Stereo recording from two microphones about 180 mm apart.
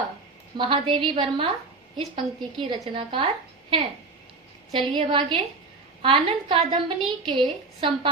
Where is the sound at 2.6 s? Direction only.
25° right (ahead or behind).